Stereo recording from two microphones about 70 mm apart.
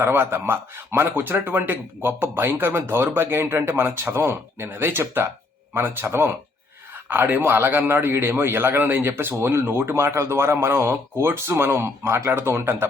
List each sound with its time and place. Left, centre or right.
0.0 s a man's voice: right